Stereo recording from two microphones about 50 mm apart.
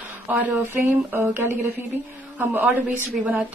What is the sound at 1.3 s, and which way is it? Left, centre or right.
Speech, right.